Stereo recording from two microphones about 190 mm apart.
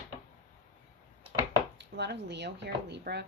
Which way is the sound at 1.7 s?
65° right (ahead or behind).